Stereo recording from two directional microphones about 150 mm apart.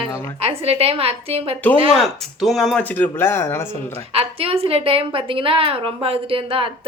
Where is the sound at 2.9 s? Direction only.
15° left (ahead or behind).